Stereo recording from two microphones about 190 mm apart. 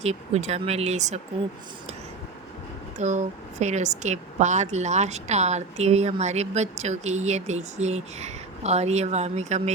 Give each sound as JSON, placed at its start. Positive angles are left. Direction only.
{"t": 0.0, "sound": "a woman's voice", "side_deg": -35}
{"t": 3.0, "sound": "a woman's voice", "side_deg": -40}